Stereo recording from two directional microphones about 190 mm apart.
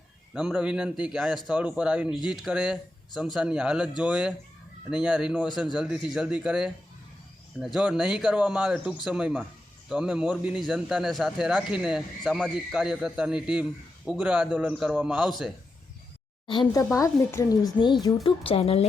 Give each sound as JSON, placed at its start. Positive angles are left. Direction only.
{"t": 0.3, "sound": "a man's voice", "side_deg": -5}
{"t": 16.5, "sound": "a woman's voice", "side_deg": 20}